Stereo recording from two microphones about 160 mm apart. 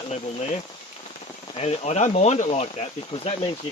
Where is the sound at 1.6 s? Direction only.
40° left (ahead or behind).